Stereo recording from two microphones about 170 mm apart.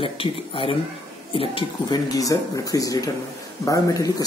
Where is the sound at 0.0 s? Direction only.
30° left (ahead or behind).